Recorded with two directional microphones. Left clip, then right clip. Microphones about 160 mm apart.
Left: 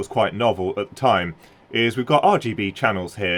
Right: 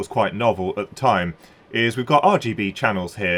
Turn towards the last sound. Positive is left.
turn(degrees=45)  # may be behind; listen again after turning